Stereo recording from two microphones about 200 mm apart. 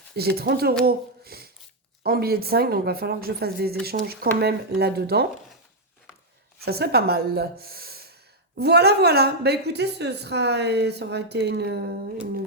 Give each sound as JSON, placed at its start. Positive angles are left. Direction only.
{"t": 0.2, "sound": "speech", "side_deg": -55}
{"t": 0.9, "sound": "a sound", "side_deg": -50}
{"t": 2.0, "sound": "speech", "side_deg": -50}
{"t": 6.7, "sound": "a woman's voice", "side_deg": -50}